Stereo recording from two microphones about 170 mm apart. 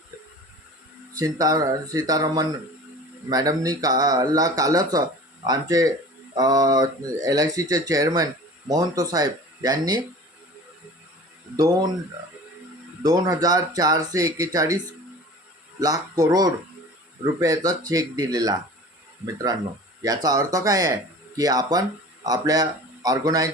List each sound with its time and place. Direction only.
1.2 s speech: 20° right (ahead or behind)
13.0 s speech: 20° right (ahead or behind)
15.8 s speech: 20° right (ahead or behind)